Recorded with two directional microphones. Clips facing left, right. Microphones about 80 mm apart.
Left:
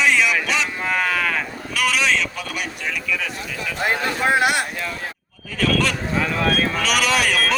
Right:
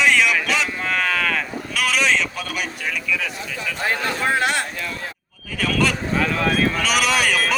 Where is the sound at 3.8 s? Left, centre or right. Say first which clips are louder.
Left 2 dB; centre.